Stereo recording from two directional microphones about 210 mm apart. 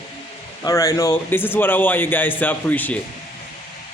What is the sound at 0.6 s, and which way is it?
Speech, 15° left (ahead or behind).